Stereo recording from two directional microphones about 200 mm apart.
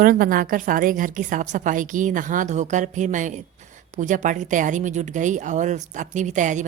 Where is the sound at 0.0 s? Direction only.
45° right (ahead or behind).